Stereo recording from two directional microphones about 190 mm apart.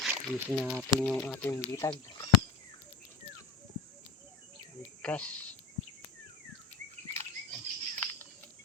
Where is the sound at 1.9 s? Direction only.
25° left (ahead or behind).